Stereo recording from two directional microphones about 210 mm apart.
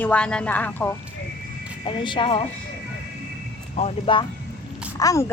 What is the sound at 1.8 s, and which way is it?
Speech, 25° left (ahead or behind).